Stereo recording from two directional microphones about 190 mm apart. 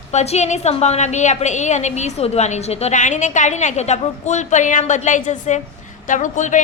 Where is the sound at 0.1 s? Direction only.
35° left (ahead or behind).